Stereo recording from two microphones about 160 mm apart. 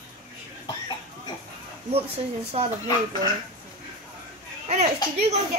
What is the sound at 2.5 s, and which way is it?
Speech, 40° right (ahead or behind).